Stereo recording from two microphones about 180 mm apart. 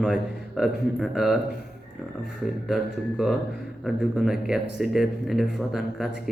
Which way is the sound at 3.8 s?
5° right (ahead or behind).